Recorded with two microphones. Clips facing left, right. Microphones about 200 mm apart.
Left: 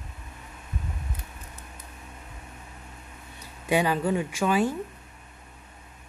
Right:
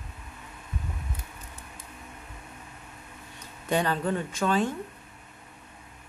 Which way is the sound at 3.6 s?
10° left (ahead or behind).